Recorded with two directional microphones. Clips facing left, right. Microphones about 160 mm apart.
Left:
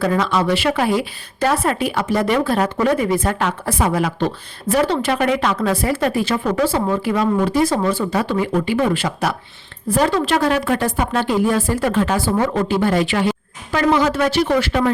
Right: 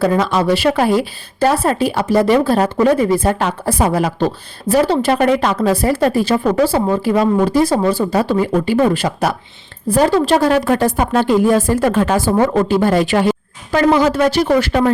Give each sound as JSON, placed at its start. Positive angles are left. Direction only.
{"t": 0.0, "sound": "a woman's voice", "side_deg": -35}